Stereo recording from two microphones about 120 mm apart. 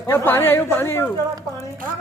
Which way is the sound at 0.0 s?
20° left (ahead or behind).